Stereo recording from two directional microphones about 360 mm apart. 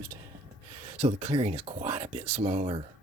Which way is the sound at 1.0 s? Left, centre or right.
Centre.